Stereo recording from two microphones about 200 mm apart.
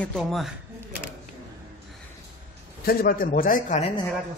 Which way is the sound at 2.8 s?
50° left (ahead or behind).